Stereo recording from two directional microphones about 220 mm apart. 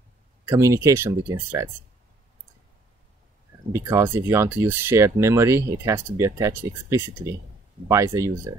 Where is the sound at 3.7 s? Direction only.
15° right (ahead or behind).